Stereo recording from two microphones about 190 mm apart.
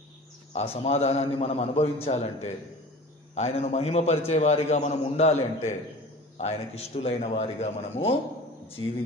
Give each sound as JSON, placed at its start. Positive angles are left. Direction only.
{"t": 0.5, "sound": "a man's voice", "side_deg": 35}